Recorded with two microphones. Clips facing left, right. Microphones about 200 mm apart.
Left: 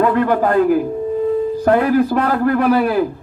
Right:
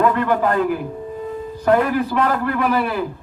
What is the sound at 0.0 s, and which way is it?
A man's voice, 45° left (ahead or behind).